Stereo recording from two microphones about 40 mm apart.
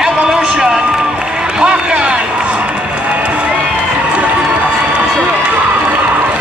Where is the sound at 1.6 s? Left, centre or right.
Right.